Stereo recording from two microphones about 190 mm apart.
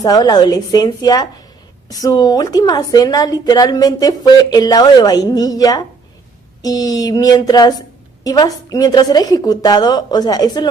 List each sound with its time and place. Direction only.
0.0 s a woman's voice: 20° left (ahead or behind)